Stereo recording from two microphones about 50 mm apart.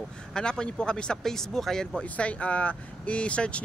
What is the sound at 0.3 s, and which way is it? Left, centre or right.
Speech, centre.